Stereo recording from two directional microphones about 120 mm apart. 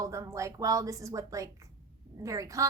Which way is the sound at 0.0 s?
25° right (ahead or behind).